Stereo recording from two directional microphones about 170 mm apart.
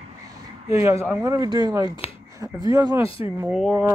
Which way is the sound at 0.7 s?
15° right (ahead or behind).